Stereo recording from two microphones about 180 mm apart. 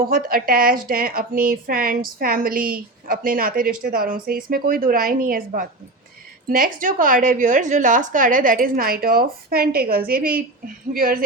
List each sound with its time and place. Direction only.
0.0 s a woman's voice: 55° right (ahead or behind)